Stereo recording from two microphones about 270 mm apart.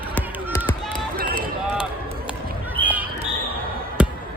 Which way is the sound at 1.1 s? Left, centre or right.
Right.